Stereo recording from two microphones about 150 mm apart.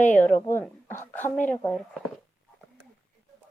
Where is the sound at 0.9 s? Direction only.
15° left (ahead or behind).